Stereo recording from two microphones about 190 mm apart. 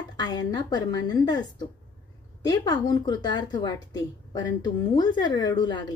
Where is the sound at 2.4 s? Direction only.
20° left (ahead or behind).